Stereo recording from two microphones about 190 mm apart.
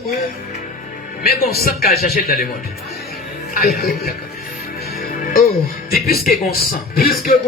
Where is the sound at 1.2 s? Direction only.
50° left (ahead or behind).